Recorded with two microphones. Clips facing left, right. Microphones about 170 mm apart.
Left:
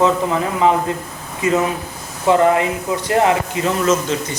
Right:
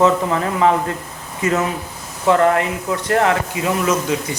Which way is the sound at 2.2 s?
20° left (ahead or behind).